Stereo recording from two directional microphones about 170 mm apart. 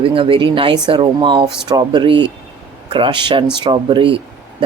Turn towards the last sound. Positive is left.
turn(degrees=-30)  # may be behind; listen again after turning